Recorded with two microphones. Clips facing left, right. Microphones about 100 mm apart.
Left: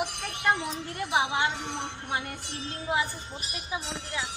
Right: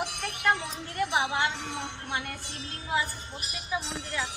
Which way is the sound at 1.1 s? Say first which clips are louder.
Left 3 dB; 20° left (ahead or behind).